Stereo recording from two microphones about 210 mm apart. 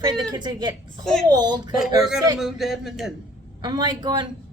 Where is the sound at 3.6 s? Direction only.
20° right (ahead or behind).